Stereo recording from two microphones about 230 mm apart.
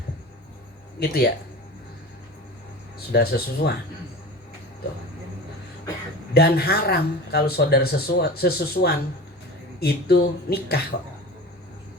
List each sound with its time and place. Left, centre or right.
0.9 s speech: left
3.1 s speech: left
6.3 s speech: left